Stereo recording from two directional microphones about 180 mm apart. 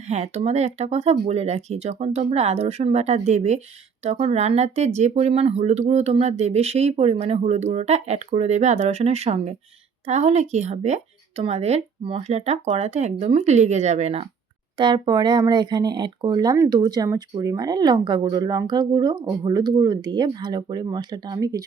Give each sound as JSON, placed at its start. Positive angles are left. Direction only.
{"t": 0.1, "sound": "speech", "side_deg": -35}
{"t": 14.8, "sound": "speech", "side_deg": -25}